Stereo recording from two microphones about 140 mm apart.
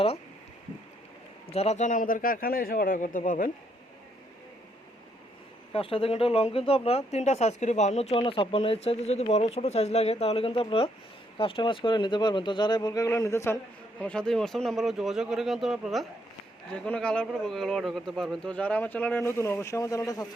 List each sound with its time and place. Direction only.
1.5 s speech: 45° left (ahead or behind); by 3.5 s 70° left (ahead or behind)
5.7 s speech: 40° left (ahead or behind)
8.1 s speech: 40° left (ahead or behind); by 13.6 s 20° left (ahead or behind)
14.0 s speech: 5° left (ahead or behind); by 20.2 s 25° left (ahead or behind)